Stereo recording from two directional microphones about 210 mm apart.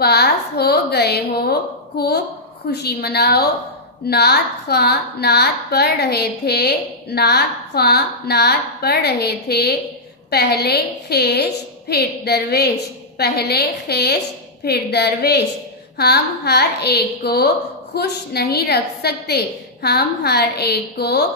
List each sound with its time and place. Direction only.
0.0 s a woman's voice: 50° left (ahead or behind)